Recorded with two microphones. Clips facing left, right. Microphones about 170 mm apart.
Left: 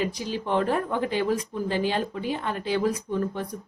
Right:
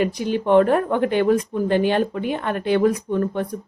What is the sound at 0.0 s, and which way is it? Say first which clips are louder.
Speech: right 7 dB; 60° right (ahead or behind).